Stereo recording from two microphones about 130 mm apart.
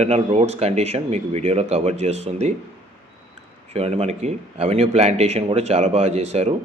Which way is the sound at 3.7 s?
50° right (ahead or behind).